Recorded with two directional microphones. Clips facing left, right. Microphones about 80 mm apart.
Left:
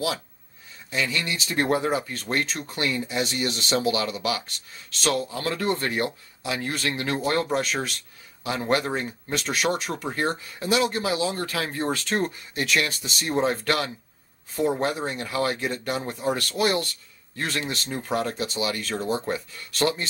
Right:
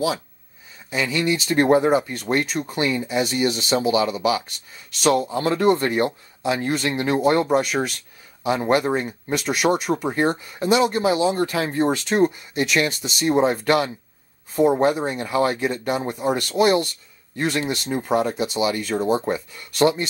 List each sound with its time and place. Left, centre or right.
0.8 s speech: centre
1.6 s speech: right
5.3 s speech: right
10.1 s speech: right
15.1 s speech: centre